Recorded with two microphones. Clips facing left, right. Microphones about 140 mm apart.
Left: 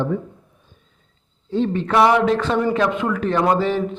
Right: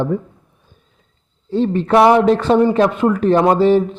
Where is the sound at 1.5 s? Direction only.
35° right (ahead or behind).